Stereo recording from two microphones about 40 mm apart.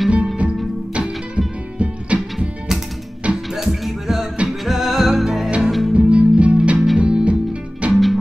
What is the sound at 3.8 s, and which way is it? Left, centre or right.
Music, centre.